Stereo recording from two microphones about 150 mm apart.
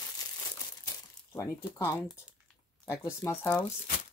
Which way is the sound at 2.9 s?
20° left (ahead or behind).